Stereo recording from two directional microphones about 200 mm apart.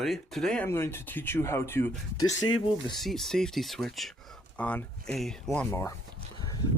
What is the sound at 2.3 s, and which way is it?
Speech, 70° left (ahead or behind).